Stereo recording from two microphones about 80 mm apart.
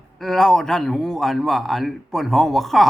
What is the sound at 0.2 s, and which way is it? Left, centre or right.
A man's voice, centre.